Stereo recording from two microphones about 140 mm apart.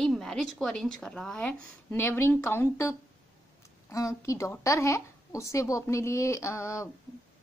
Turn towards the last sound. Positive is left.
turn(degrees=20)  # may be behind; listen again after turning